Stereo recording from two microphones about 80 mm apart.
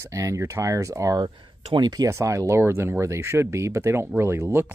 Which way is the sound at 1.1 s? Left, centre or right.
Right.